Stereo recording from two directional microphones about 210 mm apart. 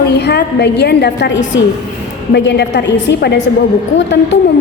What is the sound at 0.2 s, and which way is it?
A woman's voice, 50° left (ahead or behind).